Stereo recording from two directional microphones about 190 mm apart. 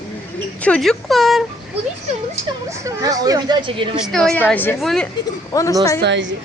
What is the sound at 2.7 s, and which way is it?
A woman's voice, 15° right (ahead or behind).